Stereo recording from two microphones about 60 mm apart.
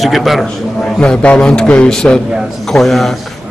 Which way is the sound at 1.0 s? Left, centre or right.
Centre.